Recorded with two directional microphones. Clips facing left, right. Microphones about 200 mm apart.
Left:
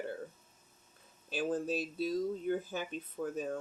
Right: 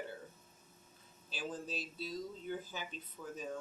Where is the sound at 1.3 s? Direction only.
55° left (ahead or behind).